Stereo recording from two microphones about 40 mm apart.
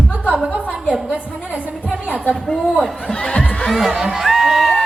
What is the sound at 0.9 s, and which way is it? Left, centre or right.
Speech, right.